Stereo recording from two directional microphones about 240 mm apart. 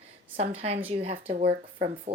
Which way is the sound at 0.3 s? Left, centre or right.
Right.